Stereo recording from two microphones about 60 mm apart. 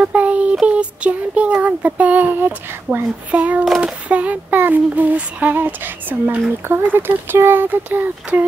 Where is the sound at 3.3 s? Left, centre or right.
Right.